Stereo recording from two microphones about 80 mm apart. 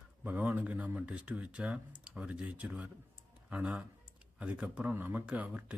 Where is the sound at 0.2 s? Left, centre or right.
Right.